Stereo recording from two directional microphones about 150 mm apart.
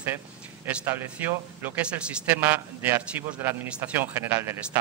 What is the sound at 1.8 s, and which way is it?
A man's voice, 10° right (ahead or behind).